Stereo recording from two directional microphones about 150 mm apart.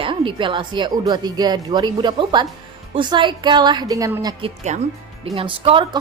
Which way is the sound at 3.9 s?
20° right (ahead or behind).